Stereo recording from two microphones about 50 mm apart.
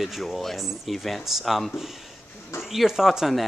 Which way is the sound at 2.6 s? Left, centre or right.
Centre.